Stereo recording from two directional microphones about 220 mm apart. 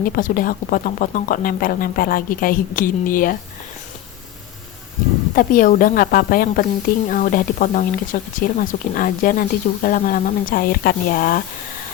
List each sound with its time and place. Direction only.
0.0 s speech: 40° left (ahead or behind)
5.3 s speech: 40° left (ahead or behind)